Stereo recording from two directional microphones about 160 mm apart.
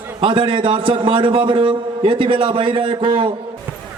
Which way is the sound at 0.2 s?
30° right (ahead or behind).